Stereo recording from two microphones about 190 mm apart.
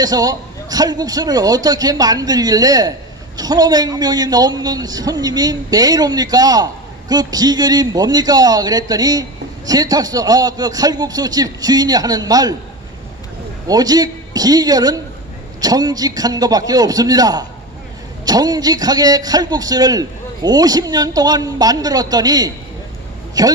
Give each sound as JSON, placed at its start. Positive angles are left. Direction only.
{"t": 0.0, "sound": "a man's voice", "side_deg": -20}
{"t": 13.7, "sound": "a man's voice", "side_deg": -20}